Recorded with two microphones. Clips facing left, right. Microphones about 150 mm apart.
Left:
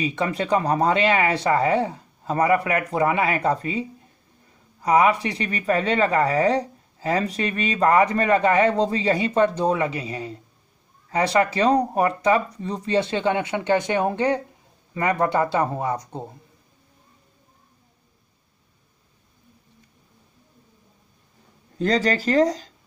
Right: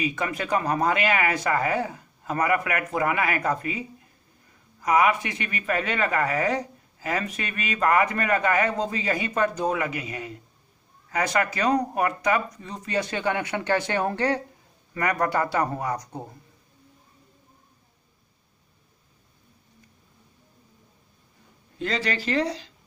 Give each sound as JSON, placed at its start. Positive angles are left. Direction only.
{"t": 0.0, "sound": "speech", "side_deg": 30}
{"t": 4.8, "sound": "speech", "side_deg": 30}
{"t": 21.7, "sound": "speech", "side_deg": 40}